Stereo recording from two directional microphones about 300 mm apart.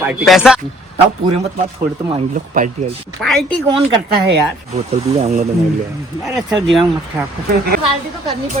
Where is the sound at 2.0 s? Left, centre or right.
Right.